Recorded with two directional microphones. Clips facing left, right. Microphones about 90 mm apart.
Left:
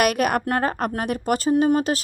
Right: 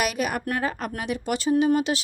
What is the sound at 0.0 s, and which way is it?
A woman's voice, 55° left (ahead or behind).